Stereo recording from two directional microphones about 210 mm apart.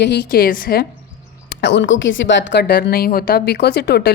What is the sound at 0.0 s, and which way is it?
Speech, 55° left (ahead or behind).